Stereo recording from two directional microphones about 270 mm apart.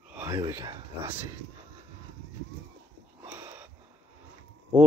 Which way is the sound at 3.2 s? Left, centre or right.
Centre.